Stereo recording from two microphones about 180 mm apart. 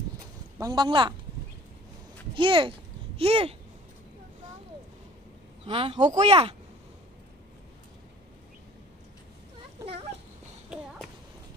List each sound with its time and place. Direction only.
0.6 s speech: 20° right (ahead or behind)
2.3 s speech: 30° right (ahead or behind)
5.7 s speech: 30° right (ahead or behind)